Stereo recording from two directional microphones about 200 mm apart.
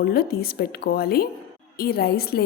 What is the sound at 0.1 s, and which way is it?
A woman's voice, 50° left (ahead or behind).